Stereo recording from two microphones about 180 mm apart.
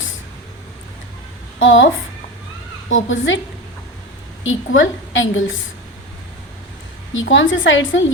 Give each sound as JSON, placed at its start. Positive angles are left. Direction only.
{"t": 1.5, "sound": "a woman's voice", "side_deg": 90}
{"t": 2.9, "sound": "a woman's voice", "side_deg": 90}
{"t": 4.4, "sound": "a woman's voice", "side_deg": 90}
{"t": 7.1, "sound": "a woman's voice", "side_deg": 90}